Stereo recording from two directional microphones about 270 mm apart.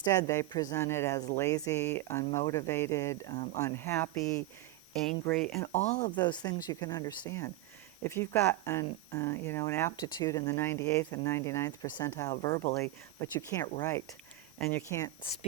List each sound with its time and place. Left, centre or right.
0.0 s speech: centre
3.3 s speech: left
3.6 s speech: centre
5.7 s speech: left
6.1 s speech: centre